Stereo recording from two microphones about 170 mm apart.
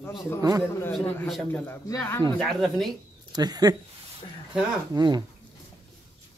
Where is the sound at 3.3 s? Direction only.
25° right (ahead or behind).